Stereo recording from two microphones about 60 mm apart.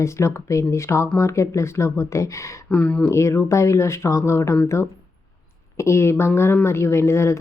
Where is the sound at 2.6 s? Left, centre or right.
Left.